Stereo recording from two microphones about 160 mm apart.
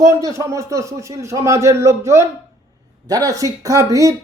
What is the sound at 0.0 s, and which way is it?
A man's voice, 20° right (ahead or behind).